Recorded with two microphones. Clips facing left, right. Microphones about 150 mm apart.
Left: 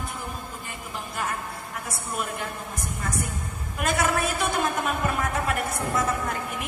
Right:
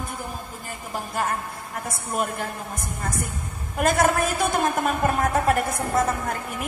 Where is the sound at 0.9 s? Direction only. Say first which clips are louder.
Right 5 dB; 40° right (ahead or behind).